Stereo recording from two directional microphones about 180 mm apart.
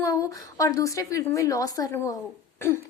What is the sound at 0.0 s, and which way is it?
A woman's voice, 20° left (ahead or behind).